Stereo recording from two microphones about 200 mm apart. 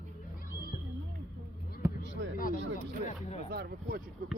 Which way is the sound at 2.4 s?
45° left (ahead or behind).